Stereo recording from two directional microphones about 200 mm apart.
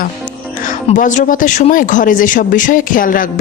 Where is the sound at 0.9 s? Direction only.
40° left (ahead or behind).